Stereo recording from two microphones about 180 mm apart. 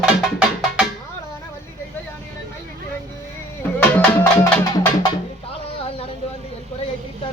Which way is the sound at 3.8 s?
10° left (ahead or behind).